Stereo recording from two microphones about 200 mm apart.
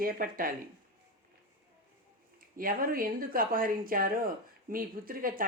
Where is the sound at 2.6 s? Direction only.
45° right (ahead or behind).